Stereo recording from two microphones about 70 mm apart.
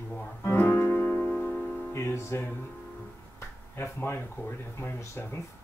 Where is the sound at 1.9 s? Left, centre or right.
Left.